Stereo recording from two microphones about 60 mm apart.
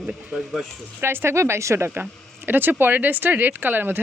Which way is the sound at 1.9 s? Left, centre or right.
Right.